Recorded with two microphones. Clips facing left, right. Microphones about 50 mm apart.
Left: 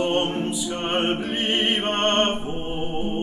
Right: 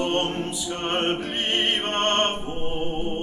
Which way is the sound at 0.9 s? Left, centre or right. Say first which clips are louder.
Left 2 dB; centre.